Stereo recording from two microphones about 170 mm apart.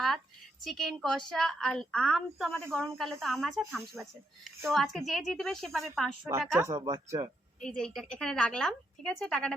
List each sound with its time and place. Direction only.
0.6 s a woman's voice: centre (ahead or behind)
6.6 s speech: 20° right (ahead or behind)
7.6 s a woman's voice: 5° left (ahead or behind)